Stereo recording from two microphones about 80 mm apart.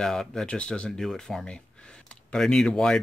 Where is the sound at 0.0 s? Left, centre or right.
Centre.